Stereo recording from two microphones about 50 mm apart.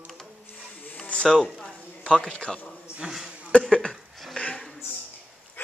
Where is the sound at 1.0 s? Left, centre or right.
Left.